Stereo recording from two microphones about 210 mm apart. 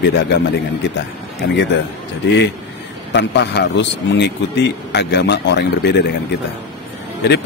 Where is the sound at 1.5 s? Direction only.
60° left (ahead or behind).